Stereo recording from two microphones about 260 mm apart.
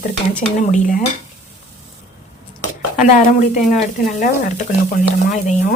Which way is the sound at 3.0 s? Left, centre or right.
Left.